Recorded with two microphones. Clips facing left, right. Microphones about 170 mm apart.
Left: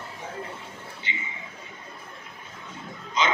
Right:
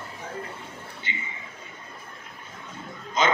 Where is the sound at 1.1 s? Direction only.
45° right (ahead or behind).